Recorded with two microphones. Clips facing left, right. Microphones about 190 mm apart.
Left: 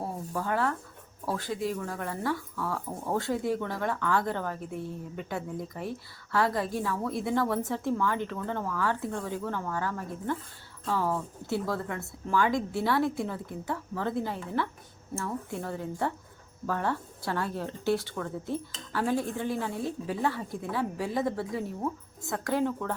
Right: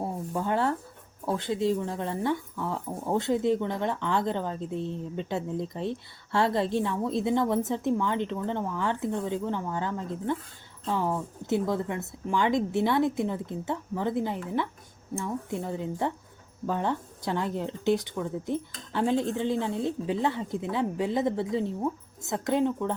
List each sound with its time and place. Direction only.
0.0 s speech: 20° right (ahead or behind)